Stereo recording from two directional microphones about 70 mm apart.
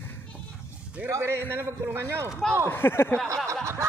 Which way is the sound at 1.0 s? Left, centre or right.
Right.